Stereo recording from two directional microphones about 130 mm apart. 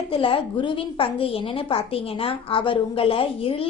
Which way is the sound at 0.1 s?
40° left (ahead or behind).